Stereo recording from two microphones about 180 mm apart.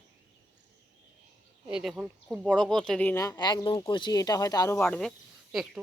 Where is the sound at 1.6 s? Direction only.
5° right (ahead or behind).